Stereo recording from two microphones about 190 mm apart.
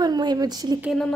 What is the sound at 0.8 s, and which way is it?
Speech, centre (ahead or behind).